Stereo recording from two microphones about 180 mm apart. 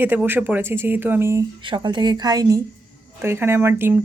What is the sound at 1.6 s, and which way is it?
A woman's voice, 25° right (ahead or behind).